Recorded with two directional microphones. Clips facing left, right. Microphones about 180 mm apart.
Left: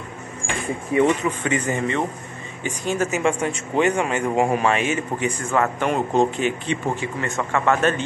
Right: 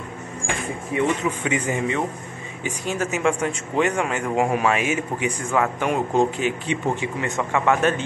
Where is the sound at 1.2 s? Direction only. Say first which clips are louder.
Left 1 dB; 10° right (ahead or behind).